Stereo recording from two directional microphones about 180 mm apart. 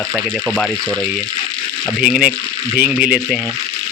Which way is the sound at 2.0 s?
Centre (ahead or behind).